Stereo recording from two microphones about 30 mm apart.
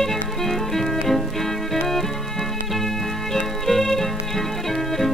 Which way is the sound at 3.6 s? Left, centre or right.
Centre.